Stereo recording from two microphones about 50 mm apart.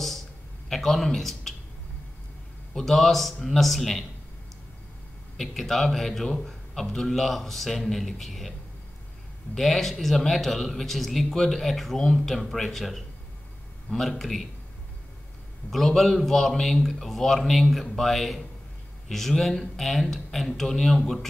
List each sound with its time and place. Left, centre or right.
0.7 s speech: centre
2.7 s a man's voice: centre
5.4 s a man's voice: centre
9.6 s a man's voice: centre
15.7 s a man's voice: centre